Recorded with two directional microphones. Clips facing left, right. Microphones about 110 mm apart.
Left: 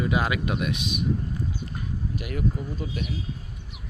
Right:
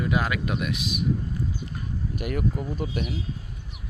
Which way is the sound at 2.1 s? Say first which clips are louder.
Right 2 dB; 50° right (ahead or behind).